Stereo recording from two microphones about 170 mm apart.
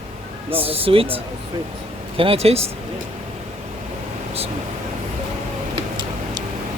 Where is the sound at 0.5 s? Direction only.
35° right (ahead or behind).